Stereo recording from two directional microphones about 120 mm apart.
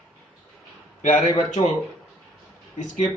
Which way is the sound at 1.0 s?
90° left.